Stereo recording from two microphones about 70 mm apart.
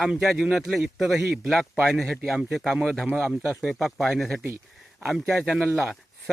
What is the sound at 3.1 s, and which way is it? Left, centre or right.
Speech, right.